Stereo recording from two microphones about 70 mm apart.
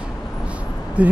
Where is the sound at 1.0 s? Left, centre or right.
Centre.